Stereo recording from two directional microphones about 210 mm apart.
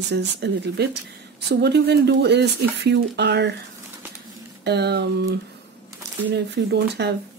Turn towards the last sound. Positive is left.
turn(degrees=-50)  # may be behind; listen again after turning